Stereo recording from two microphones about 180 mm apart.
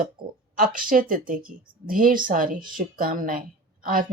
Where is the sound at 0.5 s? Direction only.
50° right (ahead or behind).